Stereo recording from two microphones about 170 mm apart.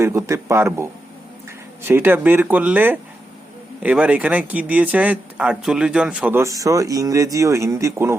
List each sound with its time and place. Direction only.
0.0 s speech: 15° right (ahead or behind)
1.9 s speech: 10° right (ahead or behind)